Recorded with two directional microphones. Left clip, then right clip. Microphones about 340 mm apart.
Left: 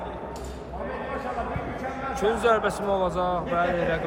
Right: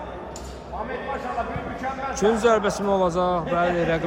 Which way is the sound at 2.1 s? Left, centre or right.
Centre.